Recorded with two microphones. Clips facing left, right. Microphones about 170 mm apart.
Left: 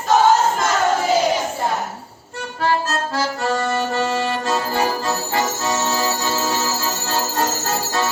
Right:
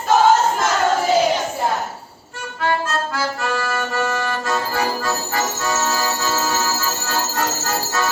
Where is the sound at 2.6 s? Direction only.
35° left (ahead or behind).